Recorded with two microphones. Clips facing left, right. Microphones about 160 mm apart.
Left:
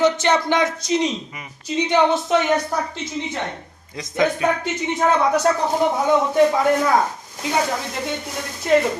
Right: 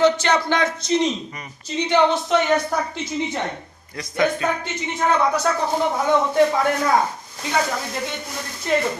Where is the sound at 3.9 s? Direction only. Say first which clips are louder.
Left 1 dB; 20° left (ahead or behind).